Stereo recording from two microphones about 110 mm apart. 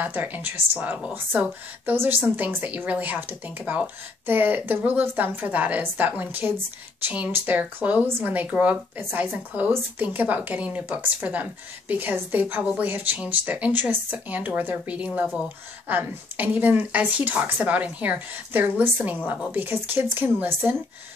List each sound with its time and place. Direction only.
0.0 s a woman's voice: 15° right (ahead or behind)